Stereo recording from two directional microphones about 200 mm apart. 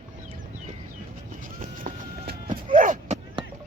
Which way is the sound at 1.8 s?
40° right (ahead or behind).